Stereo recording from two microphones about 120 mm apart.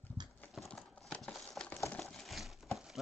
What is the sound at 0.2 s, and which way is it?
Clip-clop, 35° right (ahead or behind).